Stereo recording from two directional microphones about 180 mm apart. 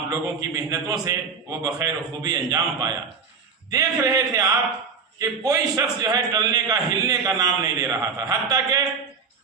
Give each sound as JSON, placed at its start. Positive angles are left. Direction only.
{"t": 0.1, "sound": "a man's voice", "side_deg": -20}